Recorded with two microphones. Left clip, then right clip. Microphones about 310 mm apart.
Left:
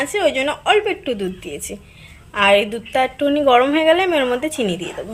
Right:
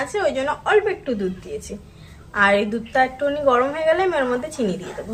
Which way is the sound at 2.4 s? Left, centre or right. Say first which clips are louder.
Left 3 dB; left.